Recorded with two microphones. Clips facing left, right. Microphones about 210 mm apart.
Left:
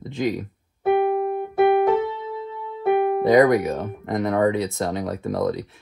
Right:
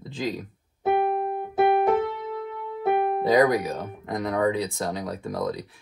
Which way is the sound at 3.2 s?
20° left (ahead or behind).